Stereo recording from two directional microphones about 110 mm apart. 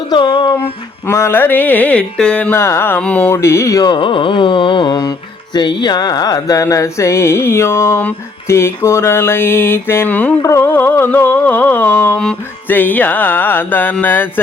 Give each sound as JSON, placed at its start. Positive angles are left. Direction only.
{"t": 0.1, "sound": "carnatic music", "side_deg": 45}
{"t": 1.0, "sound": "music", "side_deg": 20}
{"t": 2.5, "sound": "music", "side_deg": 20}
{"t": 3.2, "sound": "music", "side_deg": 25}
{"t": 3.8, "sound": "carnatic music", "side_deg": 50}
{"t": 5.5, "sound": "music", "side_deg": 40}